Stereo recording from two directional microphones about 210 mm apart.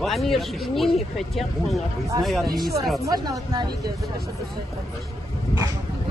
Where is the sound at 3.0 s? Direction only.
20° right (ahead or behind).